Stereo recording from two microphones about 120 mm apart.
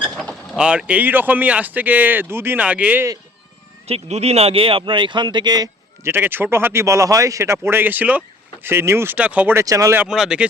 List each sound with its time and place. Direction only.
0.0 s vehicle: 5° left (ahead or behind)
0.6 s speech: 10° right (ahead or behind)
3.8 s speech: 60° right (ahead or behind); by 5.6 s 35° right (ahead or behind)
6.0 s speech: 20° right (ahead or behind)
9.6 s speech: 25° right (ahead or behind)
10.1 s speech: 5° right (ahead or behind)